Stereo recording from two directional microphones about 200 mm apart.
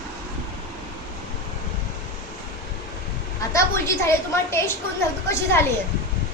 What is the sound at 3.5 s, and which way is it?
A woman's voice, 15° left (ahead or behind).